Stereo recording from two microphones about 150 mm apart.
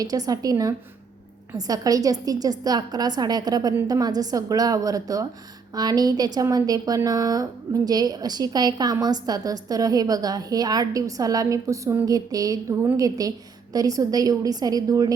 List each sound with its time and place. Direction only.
0.0 s a woman's voice: 25° right (ahead or behind)